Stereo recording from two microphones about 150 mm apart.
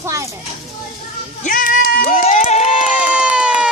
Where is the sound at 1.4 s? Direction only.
60° left (ahead or behind); by 2.7 s 45° left (ahead or behind).